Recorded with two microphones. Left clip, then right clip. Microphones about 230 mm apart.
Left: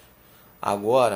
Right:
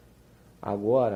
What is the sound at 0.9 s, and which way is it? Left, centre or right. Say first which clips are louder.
Speech: left 4 dB; centre.